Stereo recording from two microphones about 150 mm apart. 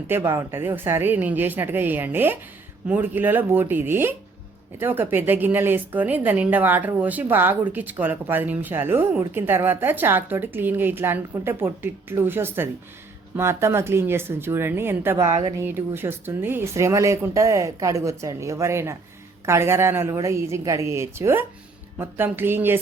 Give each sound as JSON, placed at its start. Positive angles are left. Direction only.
{"t": 0.1, "sound": "speech", "side_deg": -20}
{"t": 15.3, "sound": "speech", "side_deg": -35}
{"t": 15.5, "sound": "speech", "side_deg": -15}